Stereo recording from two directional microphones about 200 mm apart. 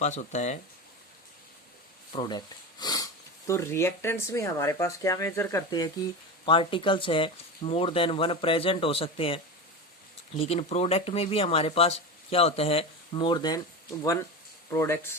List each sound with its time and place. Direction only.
0.0 s speech: 35° left (ahead or behind)
2.1 s speech: 20° left (ahead or behind)